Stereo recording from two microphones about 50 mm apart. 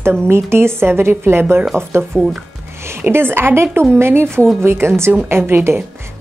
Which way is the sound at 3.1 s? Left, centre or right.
Right.